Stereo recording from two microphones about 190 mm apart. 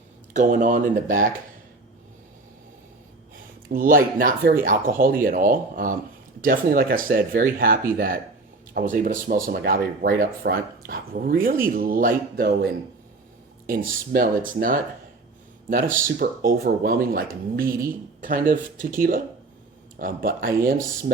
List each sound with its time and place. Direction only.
0.3 s speech: 45° right (ahead or behind)
3.7 s speech: 45° right (ahead or behind)
13.7 s speech: 50° right (ahead or behind)
16.0 s speech: 45° right (ahead or behind)